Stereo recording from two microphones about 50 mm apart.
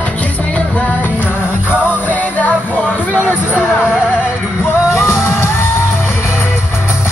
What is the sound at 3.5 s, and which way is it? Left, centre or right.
Music, right.